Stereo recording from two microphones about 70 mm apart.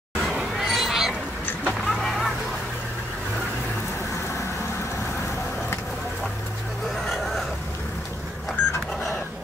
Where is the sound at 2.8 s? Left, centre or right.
Centre.